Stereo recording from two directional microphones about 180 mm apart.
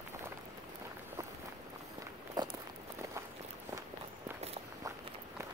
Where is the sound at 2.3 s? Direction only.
25° right (ahead or behind).